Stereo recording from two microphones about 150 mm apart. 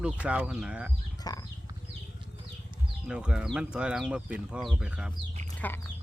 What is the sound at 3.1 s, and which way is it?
Speech, 5° right (ahead or behind).